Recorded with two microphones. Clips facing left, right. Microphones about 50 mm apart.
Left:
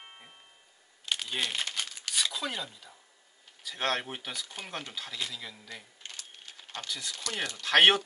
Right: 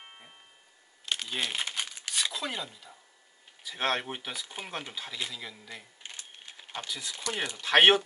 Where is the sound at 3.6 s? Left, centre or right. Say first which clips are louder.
Right 1 dB; centre.